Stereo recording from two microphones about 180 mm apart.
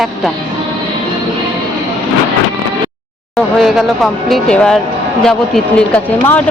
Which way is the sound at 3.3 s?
Centre (ahead or behind).